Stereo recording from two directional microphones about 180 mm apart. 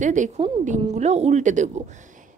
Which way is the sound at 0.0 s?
45° right (ahead or behind).